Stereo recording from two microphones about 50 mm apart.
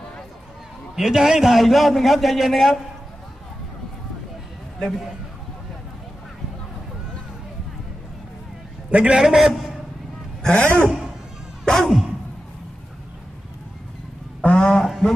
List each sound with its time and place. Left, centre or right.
0.9 s a man's voice: centre
8.9 s a man's voice: right
9.1 s a man's voice: centre
10.4 s a man's voice: left
11.6 s music: centre
14.4 s a sound: centre
14.8 s music: centre